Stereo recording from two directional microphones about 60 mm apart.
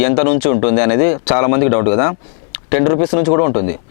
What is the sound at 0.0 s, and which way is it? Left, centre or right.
A man's voice, left.